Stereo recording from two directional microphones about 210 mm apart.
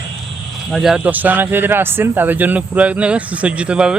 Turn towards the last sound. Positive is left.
turn(degrees=-5)  # may be behind; listen again after turning